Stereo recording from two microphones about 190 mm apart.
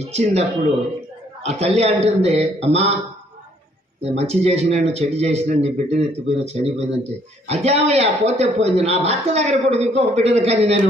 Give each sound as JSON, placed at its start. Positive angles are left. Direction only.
{"t": 0.0, "sound": "a man's voice", "side_deg": -35}
{"t": 4.0, "sound": "a man's voice", "side_deg": -35}